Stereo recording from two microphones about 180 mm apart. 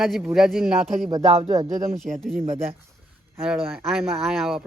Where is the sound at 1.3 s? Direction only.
35° right (ahead or behind).